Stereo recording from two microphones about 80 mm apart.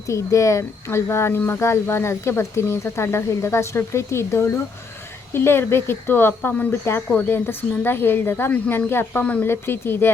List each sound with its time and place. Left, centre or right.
0.1 s speech: left
9.2 s speech: centre
9.5 s speech: left